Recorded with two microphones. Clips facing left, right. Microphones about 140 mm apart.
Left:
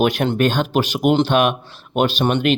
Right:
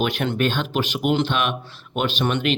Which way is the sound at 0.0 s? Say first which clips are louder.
Left 5 dB; 40° left (ahead or behind).